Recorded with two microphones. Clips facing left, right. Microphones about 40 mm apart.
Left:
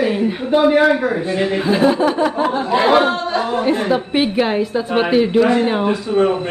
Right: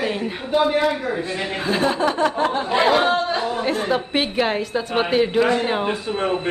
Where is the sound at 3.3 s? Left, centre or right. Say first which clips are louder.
Left 4 dB; left.